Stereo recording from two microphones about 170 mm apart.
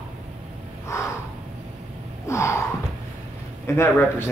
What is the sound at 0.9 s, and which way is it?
Crow, 15° left (ahead or behind).